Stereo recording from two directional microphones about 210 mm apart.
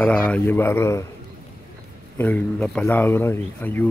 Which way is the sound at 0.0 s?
5° left (ahead or behind).